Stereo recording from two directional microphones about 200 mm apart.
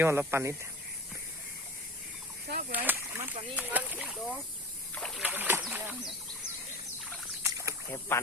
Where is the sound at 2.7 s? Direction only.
10° right (ahead or behind).